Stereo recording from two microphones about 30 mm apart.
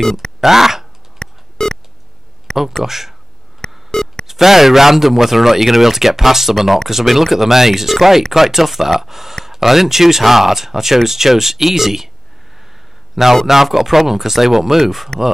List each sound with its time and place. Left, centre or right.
0.4 s speech: centre
1.2 s a sound: left
2.8 s speech: centre
3.6 s telephone dialing: left
4.3 s speech: centre
13.1 s speech: centre